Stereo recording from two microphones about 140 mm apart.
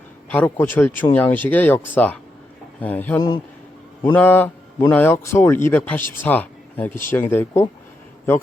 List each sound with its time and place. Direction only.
0.3 s a man's voice: 10° left (ahead or behind)
3.2 s a man's voice: 30° left (ahead or behind)
4.1 s a man's voice: 15° left (ahead or behind)